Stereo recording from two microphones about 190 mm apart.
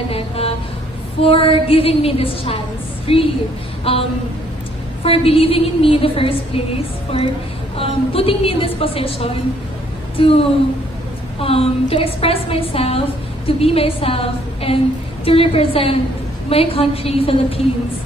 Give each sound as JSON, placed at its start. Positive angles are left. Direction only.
{"t": 0.1, "sound": "a sound", "side_deg": 30}
{"t": 1.2, "sound": "a woman's voice", "side_deg": 30}
{"t": 5.0, "sound": "a woman's voice", "side_deg": 30}
{"t": 11.4, "sound": "a woman's voice", "side_deg": 30}